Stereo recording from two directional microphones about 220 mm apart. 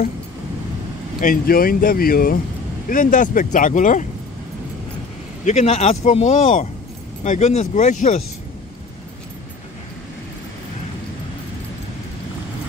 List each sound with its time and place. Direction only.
1.2 s speech: 40° left (ahead or behind)
5.4 s speech: 30° left (ahead or behind)